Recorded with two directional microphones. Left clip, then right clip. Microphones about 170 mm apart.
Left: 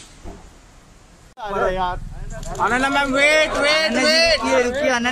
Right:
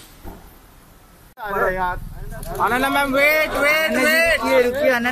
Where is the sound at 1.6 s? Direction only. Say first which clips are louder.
Even; 15° left (ahead or behind).